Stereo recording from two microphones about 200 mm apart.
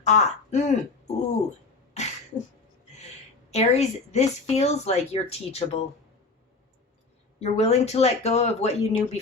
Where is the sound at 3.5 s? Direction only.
35° left (ahead or behind).